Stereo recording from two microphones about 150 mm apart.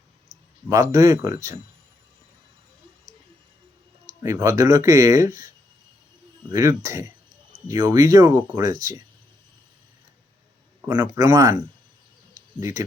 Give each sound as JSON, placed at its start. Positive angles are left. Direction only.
{"t": 0.7, "sound": "speech", "side_deg": -20}
{"t": 4.2, "sound": "speech", "side_deg": -20}
{"t": 6.5, "sound": "speech", "side_deg": -20}
{"t": 11.0, "sound": "speech", "side_deg": -20}